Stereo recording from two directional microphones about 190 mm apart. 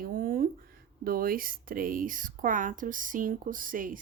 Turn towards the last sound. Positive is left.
turn(degrees=-45)  # may be behind; listen again after turning